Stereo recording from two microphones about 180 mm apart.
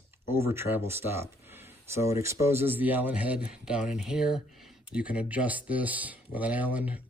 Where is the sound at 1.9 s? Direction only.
15° right (ahead or behind).